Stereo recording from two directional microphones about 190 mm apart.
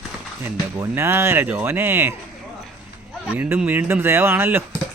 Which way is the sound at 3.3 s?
10° right (ahead or behind).